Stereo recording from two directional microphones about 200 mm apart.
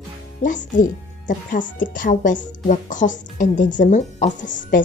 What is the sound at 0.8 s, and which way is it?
Speech, 40° left (ahead or behind).